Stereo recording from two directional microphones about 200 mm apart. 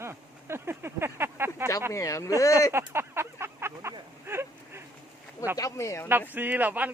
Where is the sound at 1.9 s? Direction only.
15° left (ahead or behind).